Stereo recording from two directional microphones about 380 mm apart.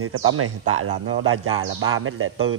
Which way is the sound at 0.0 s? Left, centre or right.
Right.